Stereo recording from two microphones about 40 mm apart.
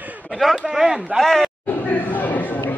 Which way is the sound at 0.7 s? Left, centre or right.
Centre.